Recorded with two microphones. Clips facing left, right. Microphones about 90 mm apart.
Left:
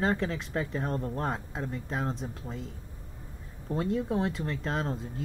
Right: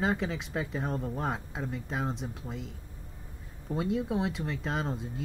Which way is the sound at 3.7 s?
5° right (ahead or behind).